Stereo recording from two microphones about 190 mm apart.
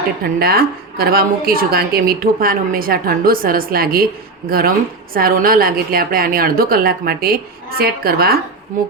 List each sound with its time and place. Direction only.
0.3 s a woman's voice: 55° right (ahead or behind)
8.7 s a woman's voice: 45° right (ahead or behind)